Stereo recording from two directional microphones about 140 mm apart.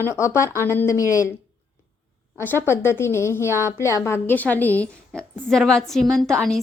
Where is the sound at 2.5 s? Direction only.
15° left (ahead or behind).